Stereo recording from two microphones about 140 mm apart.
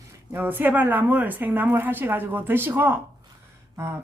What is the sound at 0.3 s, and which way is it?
A woman's voice, 15° right (ahead or behind).